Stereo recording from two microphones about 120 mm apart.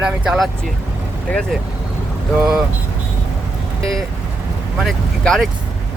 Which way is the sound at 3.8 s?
5° left (ahead or behind).